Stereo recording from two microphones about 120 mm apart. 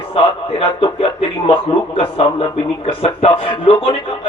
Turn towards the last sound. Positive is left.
turn(degrees=55)  # may be behind; listen again after turning